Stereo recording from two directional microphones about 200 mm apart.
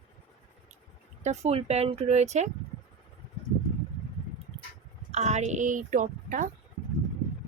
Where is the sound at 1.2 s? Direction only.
35° right (ahead or behind).